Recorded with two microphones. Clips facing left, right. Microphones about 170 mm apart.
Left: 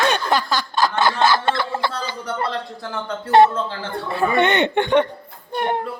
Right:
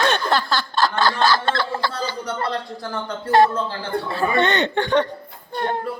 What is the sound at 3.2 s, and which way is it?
Speech, 25° left (ahead or behind).